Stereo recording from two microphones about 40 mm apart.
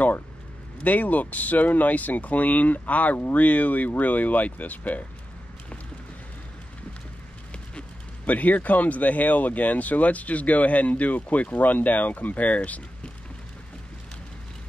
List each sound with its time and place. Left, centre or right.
0.8 s speech: left
8.3 s speech: left